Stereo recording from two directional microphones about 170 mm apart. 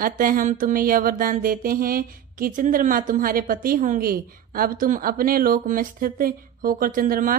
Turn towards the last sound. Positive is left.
turn(degrees=-55)  # may be behind; listen again after turning